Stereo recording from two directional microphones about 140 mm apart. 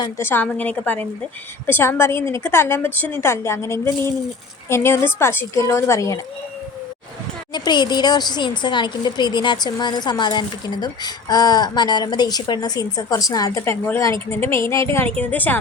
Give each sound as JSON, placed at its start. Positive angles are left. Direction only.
{"t": 0.2, "sound": "a woman's voice", "side_deg": 15}
{"t": 7.5, "sound": "a woman's voice", "side_deg": 30}